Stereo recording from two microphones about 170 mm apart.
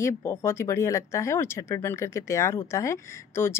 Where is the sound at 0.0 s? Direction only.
15° left (ahead or behind).